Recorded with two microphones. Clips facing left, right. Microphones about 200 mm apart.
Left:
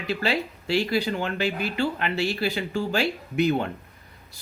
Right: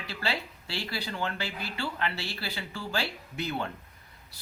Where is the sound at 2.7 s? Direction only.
45° left (ahead or behind).